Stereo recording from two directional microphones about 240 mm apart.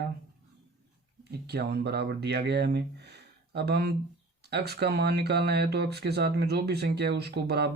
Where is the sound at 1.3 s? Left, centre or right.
Right.